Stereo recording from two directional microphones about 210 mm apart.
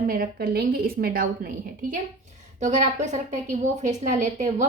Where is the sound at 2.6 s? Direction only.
35° right (ahead or behind).